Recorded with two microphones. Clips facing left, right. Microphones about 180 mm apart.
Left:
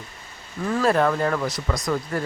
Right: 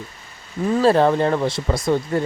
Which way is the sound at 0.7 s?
30° right (ahead or behind).